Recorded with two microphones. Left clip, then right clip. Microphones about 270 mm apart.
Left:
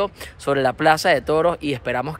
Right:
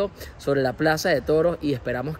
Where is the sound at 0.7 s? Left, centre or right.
Centre.